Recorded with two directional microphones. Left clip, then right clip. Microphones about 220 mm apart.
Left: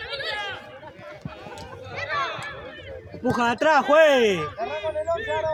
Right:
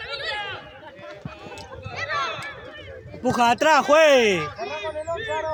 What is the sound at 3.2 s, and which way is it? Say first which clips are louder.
Speech: right 3 dB; 50° right (ahead or behind).